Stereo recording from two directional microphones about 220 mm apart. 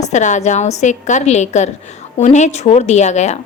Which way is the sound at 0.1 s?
35° left (ahead or behind).